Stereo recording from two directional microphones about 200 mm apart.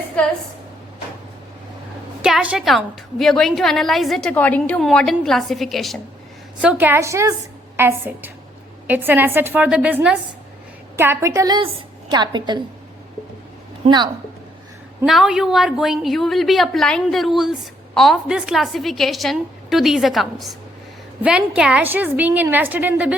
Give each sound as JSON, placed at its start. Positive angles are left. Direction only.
{"t": 0.2, "sound": "a woman's voice", "side_deg": 5}
{"t": 2.2, "sound": "a woman's voice", "side_deg": -5}
{"t": 13.8, "sound": "a woman's voice", "side_deg": -20}
{"t": 15.0, "sound": "a woman's voice", "side_deg": 0}